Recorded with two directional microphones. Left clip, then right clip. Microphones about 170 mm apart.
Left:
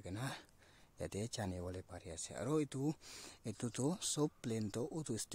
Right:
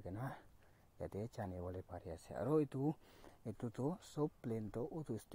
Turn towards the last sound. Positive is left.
turn(degrees=20)  # may be behind; listen again after turning